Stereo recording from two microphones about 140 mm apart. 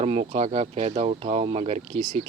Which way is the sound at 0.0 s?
45° right (ahead or behind).